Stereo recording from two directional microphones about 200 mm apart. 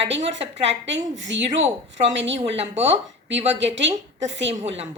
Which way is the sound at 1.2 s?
65° right (ahead or behind).